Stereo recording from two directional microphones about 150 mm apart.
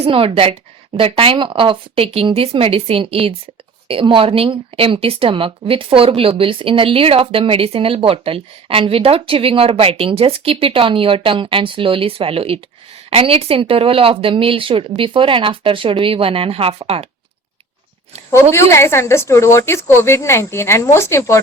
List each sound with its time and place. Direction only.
0.0 s speech: 40° right (ahead or behind)
18.5 s a woman's voice: 20° left (ahead or behind)